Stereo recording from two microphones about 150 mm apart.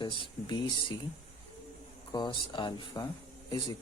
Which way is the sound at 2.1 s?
30° left (ahead or behind).